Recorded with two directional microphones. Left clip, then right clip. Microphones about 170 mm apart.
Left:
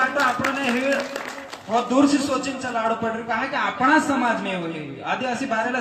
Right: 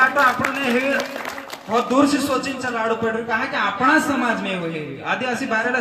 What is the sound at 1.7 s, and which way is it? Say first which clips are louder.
A man's voice: right 2 dB; 25° right (ahead or behind).